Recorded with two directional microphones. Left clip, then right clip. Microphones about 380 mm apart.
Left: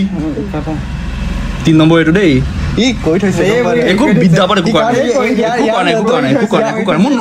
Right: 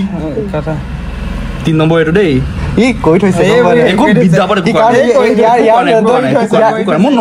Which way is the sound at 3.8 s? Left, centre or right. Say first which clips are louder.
Right 2 dB; centre.